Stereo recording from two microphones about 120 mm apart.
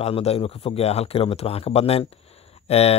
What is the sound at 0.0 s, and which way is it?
Speech, 55° left (ahead or behind).